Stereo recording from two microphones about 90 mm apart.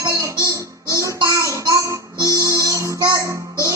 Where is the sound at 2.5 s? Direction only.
35° right (ahead or behind).